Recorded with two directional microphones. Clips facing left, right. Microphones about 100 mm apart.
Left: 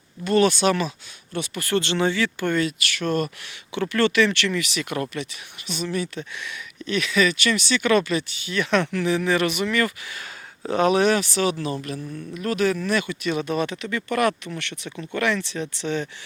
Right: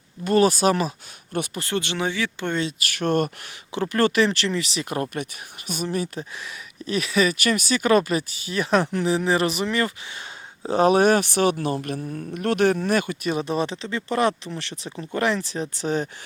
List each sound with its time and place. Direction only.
0.3 s speech: 40° right (ahead or behind)
1.7 s speech: 10° right (ahead or behind)
2.7 s speech: 45° right (ahead or behind)
3.7 s speech: 40° right (ahead or behind)
5.1 s speech: 50° right (ahead or behind)